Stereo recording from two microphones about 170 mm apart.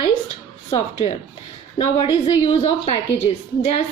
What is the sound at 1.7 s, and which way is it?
A woman's voice, 35° left (ahead or behind).